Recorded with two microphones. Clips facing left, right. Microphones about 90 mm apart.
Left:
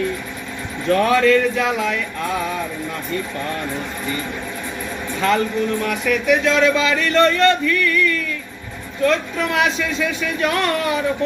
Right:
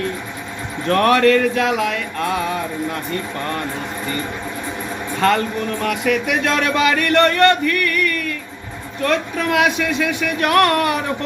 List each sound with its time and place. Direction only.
0.9 s music: 75° right (ahead or behind)
5.8 s speech: 65° right (ahead or behind)